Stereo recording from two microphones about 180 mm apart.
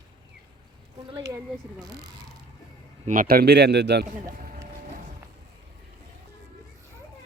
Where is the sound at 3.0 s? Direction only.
45° right (ahead or behind); by 4.0 s 70° right (ahead or behind).